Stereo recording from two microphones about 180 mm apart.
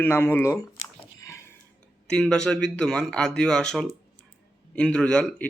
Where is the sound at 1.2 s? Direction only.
15° left (ahead or behind).